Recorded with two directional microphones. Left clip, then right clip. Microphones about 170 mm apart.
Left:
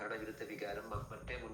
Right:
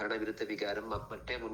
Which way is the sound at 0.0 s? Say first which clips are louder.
Right 7 dB; 40° right (ahead or behind).